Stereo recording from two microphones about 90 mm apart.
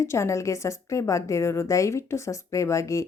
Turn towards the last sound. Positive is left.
turn(degrees=35)  # may be behind; listen again after turning